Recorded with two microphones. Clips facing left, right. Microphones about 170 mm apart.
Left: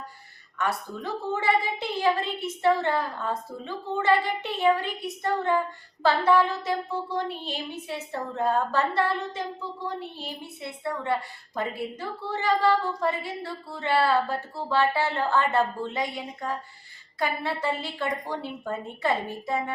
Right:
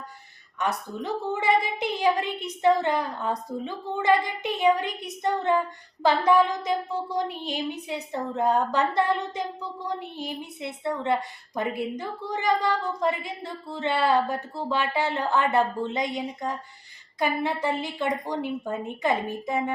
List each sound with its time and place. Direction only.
0.6 s a woman's voice: 20° right (ahead or behind)